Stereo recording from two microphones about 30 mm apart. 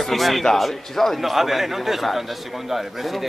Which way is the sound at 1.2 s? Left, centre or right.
Centre.